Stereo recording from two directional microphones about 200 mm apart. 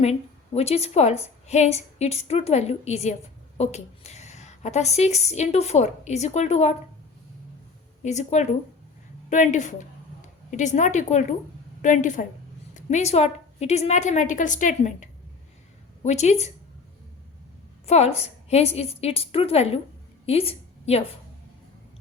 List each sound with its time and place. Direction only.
0.0 s a woman's voice: 30° left (ahead or behind)
8.0 s a woman's voice: 35° left (ahead or behind)
17.8 s a woman's voice: 35° left (ahead or behind)
20.2 s a sound: 30° left (ahead or behind)